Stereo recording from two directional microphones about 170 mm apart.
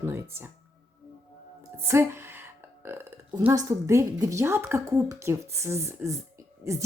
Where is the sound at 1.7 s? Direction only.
15° right (ahead or behind).